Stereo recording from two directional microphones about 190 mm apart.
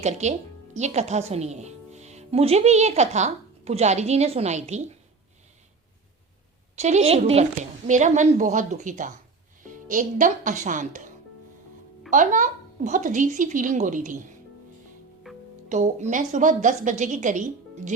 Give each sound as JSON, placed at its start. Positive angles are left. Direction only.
{"t": 0.0, "sound": "a woman's voice", "side_deg": -35}
{"t": 6.7, "sound": "a woman's voice", "side_deg": -35}
{"t": 12.1, "sound": "speech", "side_deg": -45}
{"t": 15.3, "sound": "music", "side_deg": 0}
{"t": 15.7, "sound": "a woman's voice", "side_deg": -40}